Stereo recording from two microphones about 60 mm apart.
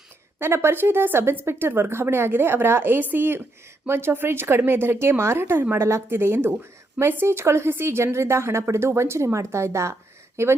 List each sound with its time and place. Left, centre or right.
0.3 s a woman's voice: right